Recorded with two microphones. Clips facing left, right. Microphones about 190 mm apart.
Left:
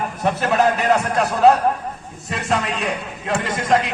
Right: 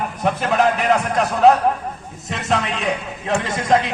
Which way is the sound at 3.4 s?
25° right (ahead or behind).